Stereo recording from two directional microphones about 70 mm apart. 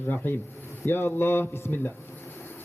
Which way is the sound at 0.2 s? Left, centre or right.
Left.